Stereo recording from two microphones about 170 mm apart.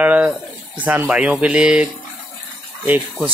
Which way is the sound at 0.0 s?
10° right (ahead or behind).